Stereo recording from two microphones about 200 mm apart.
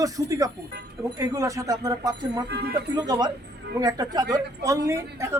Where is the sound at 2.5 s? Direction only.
55° right (ahead or behind).